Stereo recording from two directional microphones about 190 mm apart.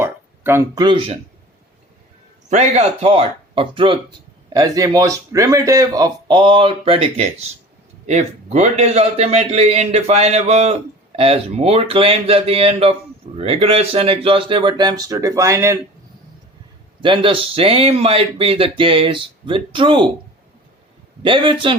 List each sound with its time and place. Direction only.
0.0 s a sound: 15° right (ahead or behind)
0.9 s speech: 30° right (ahead or behind)
2.5 s a man's voice: 35° right (ahead or behind); by 15.8 s 15° right (ahead or behind)
17.0 s speech: 25° right (ahead or behind)
21.2 s speech: 25° right (ahead or behind)